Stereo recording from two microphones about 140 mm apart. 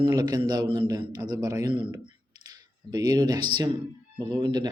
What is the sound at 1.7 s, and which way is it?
Speech, 35° right (ahead or behind).